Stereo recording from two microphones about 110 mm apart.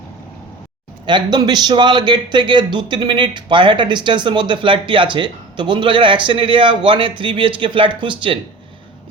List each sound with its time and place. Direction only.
1.0 s a man's voice: 45° right (ahead or behind)